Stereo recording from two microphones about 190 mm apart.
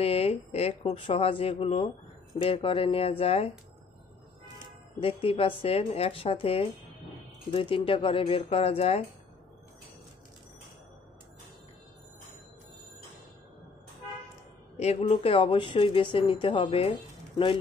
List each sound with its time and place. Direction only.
0.0 s speech: 30° left (ahead or behind)
5.0 s speech: 30° left (ahead or behind)
14.8 s speech: 35° left (ahead or behind)